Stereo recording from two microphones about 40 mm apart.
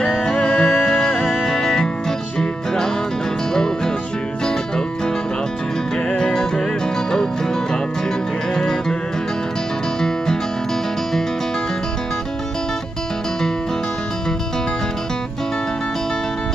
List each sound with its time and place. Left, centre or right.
0.4 s music: left
0.8 s music: centre
1.3 s music: centre
3.5 s music: centre
6.1 s music: centre
8.5 s music: centre